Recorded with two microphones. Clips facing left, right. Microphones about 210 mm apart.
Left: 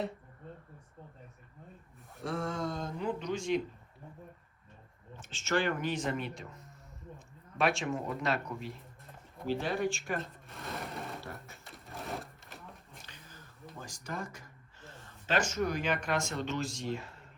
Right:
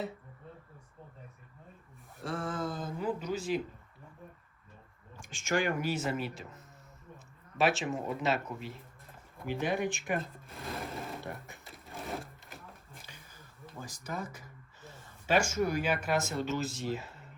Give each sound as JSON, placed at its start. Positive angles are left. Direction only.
{"t": 2.1, "sound": "speech", "side_deg": 0}
{"t": 5.2, "sound": "speech", "side_deg": -15}
{"t": 9.6, "sound": "speech", "side_deg": -20}
{"t": 10.2, "sound": "speech", "side_deg": 0}
{"t": 11.6, "sound": "a sound", "side_deg": 0}
{"t": 13.7, "sound": "speech", "side_deg": -5}